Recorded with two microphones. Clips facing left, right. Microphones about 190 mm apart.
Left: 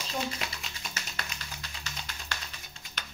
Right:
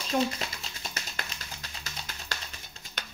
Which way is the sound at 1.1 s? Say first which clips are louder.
Right 1 dB; 40° right (ahead or behind).